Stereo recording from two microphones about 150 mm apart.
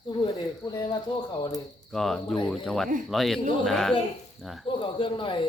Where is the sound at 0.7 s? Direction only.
30° left (ahead or behind).